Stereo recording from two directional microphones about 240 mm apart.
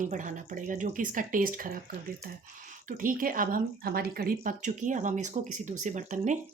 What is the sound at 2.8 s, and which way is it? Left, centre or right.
A woman's voice, right.